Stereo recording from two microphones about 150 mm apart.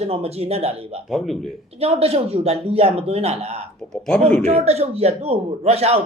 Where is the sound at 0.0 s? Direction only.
45° right (ahead or behind).